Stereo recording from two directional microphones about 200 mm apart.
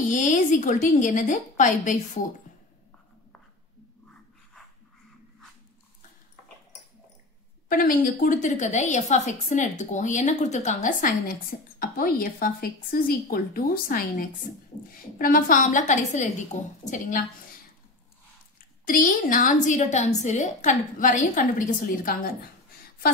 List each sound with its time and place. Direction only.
0.1 s a woman's voice: 40° left (ahead or behind)
7.6 s a woman's voice: 45° left (ahead or behind)
18.9 s a woman's voice: 45° left (ahead or behind)